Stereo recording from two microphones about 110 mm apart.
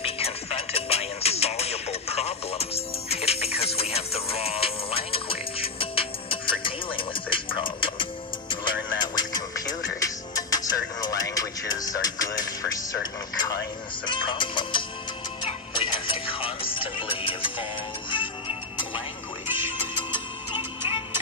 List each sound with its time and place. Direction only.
0.0 s music: 65° left (ahead or behind); by 19.0 s 50° left (ahead or behind)
20.1 s music: 50° left (ahead or behind)